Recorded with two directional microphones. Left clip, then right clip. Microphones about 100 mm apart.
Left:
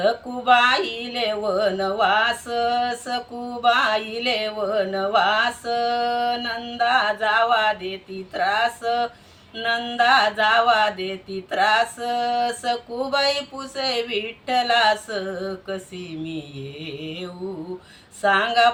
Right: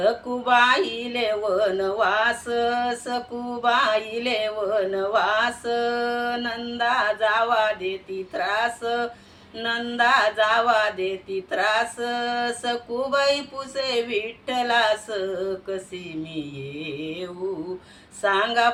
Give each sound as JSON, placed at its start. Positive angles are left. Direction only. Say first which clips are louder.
{"t": 0.0, "sound": "mantra", "louder": "left 1 dB", "side_deg": -35}
{"t": 18.2, "sound": "mantra", "louder": "left 3 dB", "side_deg": -35}